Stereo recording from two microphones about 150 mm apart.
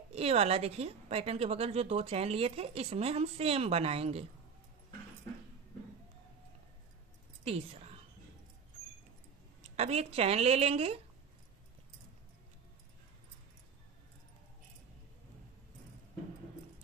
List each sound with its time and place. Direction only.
0.1 s a woman's voice: 45° right (ahead or behind)
7.4 s speech: 45° right (ahead or behind)
9.6 s a woman's voice: 45° right (ahead or behind)